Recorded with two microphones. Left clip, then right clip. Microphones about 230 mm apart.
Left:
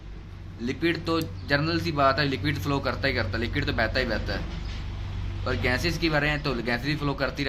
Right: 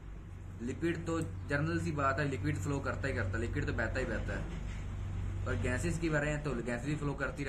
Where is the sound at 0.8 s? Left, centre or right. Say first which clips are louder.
Left 10 dB; left.